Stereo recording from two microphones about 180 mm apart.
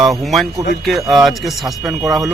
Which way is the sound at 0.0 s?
Centre (ahead or behind).